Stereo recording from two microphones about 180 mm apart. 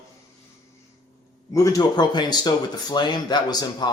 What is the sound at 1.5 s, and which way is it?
Speech, 20° left (ahead or behind).